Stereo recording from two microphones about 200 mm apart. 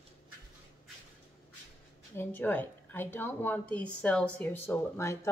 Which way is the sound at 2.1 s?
10° left (ahead or behind).